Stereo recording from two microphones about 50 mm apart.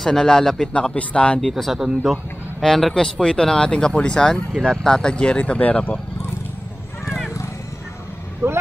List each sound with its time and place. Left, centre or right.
0.0 s speech: centre
0.7 s speech: left
1.6 s speech: centre
2.6 s speech: centre; by 5.9 s left
7.1 s a sound: centre
8.4 s speech: right